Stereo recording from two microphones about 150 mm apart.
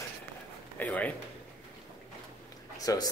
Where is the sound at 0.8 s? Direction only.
10° left (ahead or behind).